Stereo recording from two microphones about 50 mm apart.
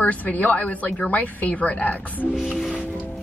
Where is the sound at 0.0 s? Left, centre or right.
Left.